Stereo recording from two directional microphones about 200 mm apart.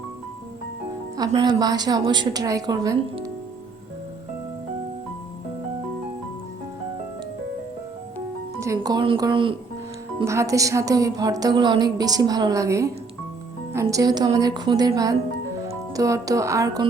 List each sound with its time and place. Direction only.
1.1 s a woman's voice: 20° right (ahead or behind)
8.6 s a woman's voice: 15° right (ahead or behind)
10.2 s a woman's voice: 15° right (ahead or behind)